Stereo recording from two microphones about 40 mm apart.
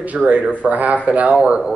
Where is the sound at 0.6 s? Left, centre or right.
Right.